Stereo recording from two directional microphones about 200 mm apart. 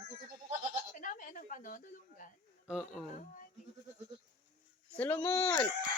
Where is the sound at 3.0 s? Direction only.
40° left (ahead or behind).